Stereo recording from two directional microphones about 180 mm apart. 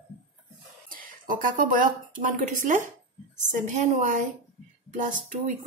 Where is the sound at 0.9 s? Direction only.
50° right (ahead or behind).